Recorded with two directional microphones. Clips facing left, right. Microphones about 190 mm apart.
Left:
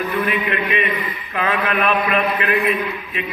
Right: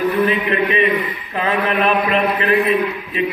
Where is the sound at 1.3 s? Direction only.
30° right (ahead or behind).